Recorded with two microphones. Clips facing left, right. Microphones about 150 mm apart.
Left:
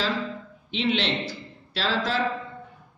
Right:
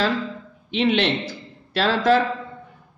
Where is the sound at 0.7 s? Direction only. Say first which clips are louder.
Right 5 dB; 55° right (ahead or behind).